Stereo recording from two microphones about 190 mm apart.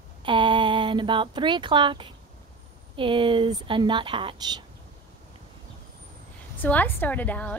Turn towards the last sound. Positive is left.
turn(degrees=10)  # may be behind; listen again after turning